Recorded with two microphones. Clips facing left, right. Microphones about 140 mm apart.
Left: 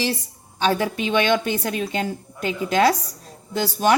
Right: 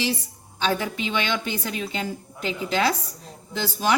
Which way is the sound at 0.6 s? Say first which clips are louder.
Left 4 dB; 45° left (ahead or behind).